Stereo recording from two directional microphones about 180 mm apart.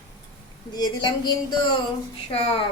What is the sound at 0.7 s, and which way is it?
Speech, 25° left (ahead or behind).